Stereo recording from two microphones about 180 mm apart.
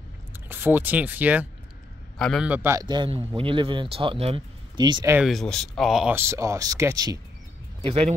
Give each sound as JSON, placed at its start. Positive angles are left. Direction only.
{"t": 0.5, "sound": "speech", "side_deg": -10}
{"t": 2.1, "sound": "a man's voice", "side_deg": 0}
{"t": 5.1, "sound": "speech", "side_deg": 0}
{"t": 6.1, "sound": "speech", "side_deg": -15}
{"t": 7.8, "sound": "speech", "side_deg": -35}